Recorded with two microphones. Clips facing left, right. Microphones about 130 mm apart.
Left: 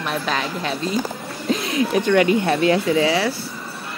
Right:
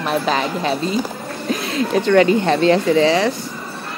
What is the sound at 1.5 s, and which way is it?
Speech, 15° left (ahead or behind).